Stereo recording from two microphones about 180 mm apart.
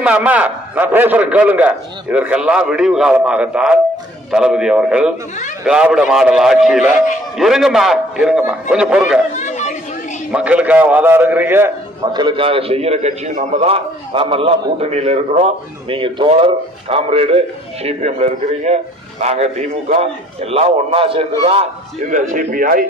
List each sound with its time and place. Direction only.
0.0 s a man's voice: 10° right (ahead or behind)
9.3 s chatter: 40° left (ahead or behind)
10.3 s a man's voice: 5° right (ahead or behind)
12.0 s a man's voice: 25° right (ahead or behind)
22.1 s speech: 45° right (ahead or behind)